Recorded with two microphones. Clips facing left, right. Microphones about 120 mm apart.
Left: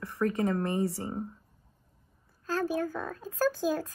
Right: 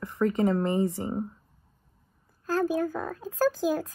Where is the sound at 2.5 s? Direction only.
15° right (ahead or behind).